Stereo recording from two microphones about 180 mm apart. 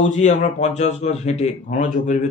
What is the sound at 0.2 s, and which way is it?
A man's voice, 40° left (ahead or behind).